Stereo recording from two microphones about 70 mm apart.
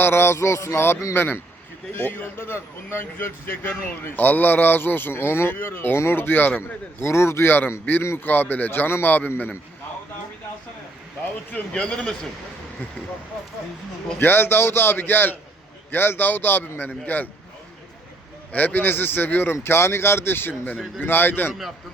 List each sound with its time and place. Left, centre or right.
0.0 s speech: left
6.6 s a man's voice: left
11.5 s a man's voice: centre
14.2 s a man's voice: left
18.5 s a man's voice: left